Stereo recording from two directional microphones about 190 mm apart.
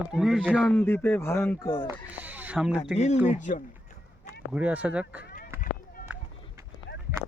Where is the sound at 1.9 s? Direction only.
10° right (ahead or behind).